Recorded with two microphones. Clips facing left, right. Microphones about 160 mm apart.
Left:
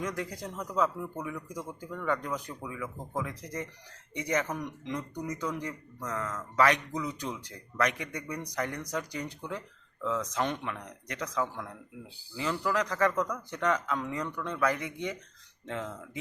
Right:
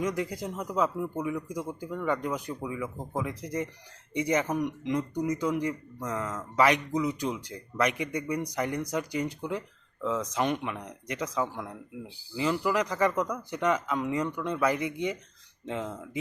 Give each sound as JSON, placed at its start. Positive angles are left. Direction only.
{"t": 0.0, "sound": "speech", "side_deg": -20}